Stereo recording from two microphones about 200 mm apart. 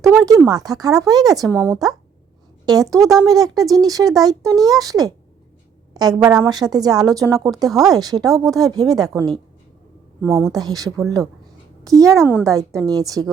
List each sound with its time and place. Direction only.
0.0 s a child's voice: 15° right (ahead or behind)